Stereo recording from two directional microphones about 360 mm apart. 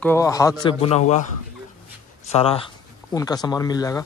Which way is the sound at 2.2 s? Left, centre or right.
Centre.